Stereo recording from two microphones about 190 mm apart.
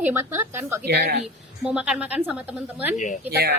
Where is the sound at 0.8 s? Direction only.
60° right (ahead or behind).